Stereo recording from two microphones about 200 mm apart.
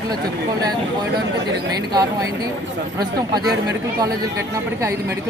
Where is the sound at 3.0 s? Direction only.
20° right (ahead or behind).